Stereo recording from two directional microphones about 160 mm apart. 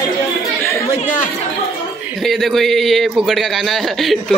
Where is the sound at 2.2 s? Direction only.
Centre (ahead or behind).